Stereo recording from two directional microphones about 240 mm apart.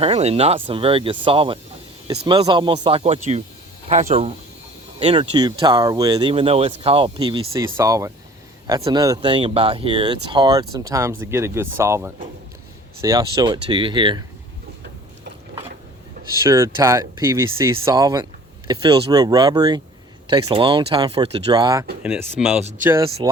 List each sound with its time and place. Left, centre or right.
0.0 s speech: right
16.4 s speech: centre
23.0 s speech: right